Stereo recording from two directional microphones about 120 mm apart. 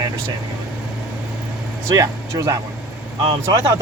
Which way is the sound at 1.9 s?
25° right (ahead or behind).